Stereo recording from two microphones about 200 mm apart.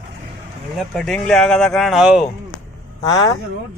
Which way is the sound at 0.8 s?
Centre (ahead or behind).